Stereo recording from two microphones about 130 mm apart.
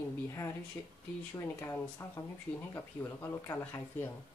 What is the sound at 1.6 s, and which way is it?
Speech, 20° left (ahead or behind).